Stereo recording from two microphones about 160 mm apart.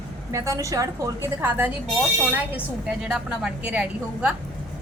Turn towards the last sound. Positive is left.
turn(degrees=-5)  # may be behind; listen again after turning